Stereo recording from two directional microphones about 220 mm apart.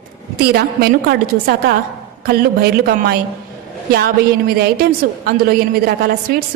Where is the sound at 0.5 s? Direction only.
45° right (ahead or behind).